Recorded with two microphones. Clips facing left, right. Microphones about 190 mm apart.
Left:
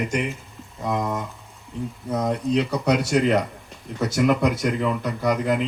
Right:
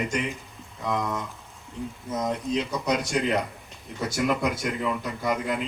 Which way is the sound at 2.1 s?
60° left (ahead or behind).